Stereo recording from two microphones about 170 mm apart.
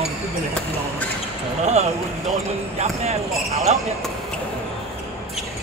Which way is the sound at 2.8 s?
40° right (ahead or behind).